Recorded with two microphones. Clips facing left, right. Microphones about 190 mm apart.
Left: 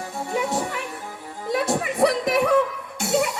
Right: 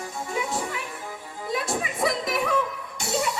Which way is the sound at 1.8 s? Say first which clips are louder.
Left 6 dB; 65° left (ahead or behind).